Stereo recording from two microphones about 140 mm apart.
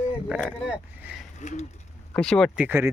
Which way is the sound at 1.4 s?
60° left (ahead or behind).